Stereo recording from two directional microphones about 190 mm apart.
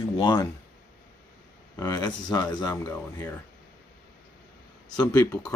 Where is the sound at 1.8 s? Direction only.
15° left (ahead or behind).